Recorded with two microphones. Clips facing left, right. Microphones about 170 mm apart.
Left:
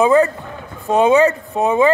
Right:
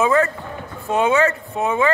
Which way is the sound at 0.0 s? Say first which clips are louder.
Left 4 dB; 20° left (ahead or behind).